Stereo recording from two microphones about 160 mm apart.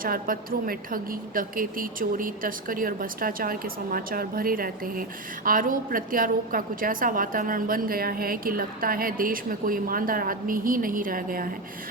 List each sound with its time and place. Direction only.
0.0 s a woman's voice: 60° right (ahead or behind)